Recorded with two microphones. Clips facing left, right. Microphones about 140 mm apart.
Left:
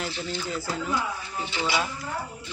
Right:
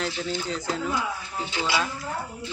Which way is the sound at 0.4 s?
5° left (ahead or behind).